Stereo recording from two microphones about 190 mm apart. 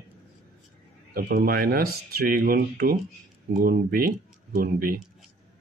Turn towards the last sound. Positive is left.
turn(degrees=-50)  # may be behind; listen again after turning